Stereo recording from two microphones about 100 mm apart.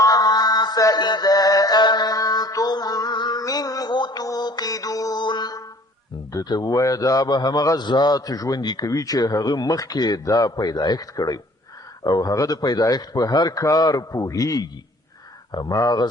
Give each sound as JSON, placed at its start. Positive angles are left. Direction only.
{"t": 0.0, "sound": "mantra", "side_deg": 40}
{"t": 6.3, "sound": "a man's voice", "side_deg": 45}